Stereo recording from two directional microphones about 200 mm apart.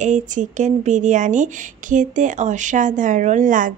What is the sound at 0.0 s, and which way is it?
Speech, 40° right (ahead or behind).